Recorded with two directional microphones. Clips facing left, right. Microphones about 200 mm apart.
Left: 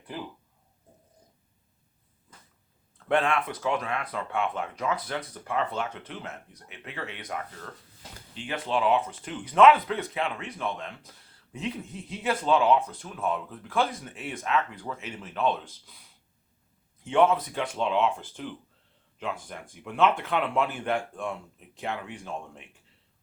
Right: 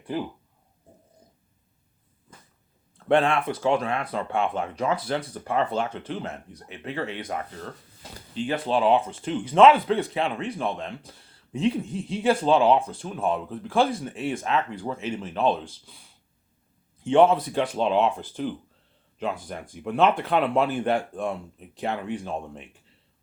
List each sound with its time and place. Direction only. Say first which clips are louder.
3.1 s speech: right 4 dB; 30° right (ahead or behind)